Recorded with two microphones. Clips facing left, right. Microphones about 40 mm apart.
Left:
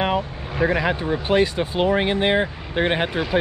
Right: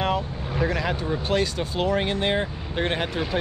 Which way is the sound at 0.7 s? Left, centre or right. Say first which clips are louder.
Left 6 dB; left.